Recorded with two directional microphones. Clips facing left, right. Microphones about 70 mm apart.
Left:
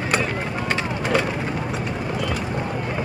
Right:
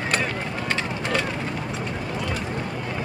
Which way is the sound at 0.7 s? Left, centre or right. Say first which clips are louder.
Left 4 dB; centre.